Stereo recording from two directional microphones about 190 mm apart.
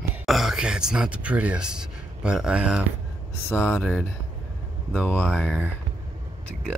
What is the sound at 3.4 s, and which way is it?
Speech, 10° left (ahead or behind).